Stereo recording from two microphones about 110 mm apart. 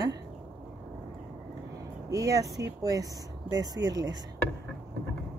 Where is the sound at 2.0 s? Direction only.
30° right (ahead or behind).